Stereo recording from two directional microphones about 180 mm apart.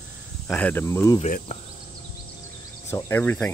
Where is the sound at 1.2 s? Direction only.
40° left (ahead or behind).